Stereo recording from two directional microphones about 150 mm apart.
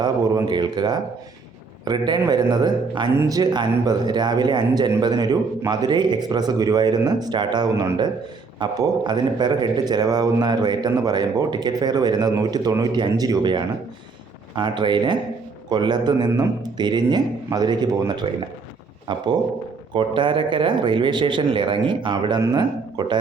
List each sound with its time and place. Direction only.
0.0 s speech: 30° right (ahead or behind)